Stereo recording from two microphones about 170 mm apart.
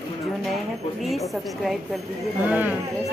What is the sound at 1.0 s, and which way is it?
A woman's voice, centre (ahead or behind).